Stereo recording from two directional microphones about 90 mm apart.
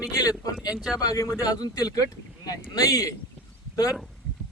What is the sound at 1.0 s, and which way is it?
A man's voice, 40° left (ahead or behind).